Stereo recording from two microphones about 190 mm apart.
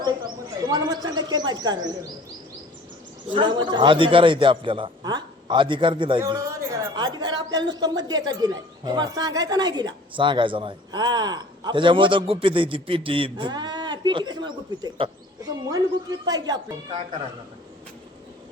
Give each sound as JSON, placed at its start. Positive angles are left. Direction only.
{"t": 0.7, "sound": "speech", "side_deg": -20}
{"t": 3.3, "sound": "speech", "side_deg": -25}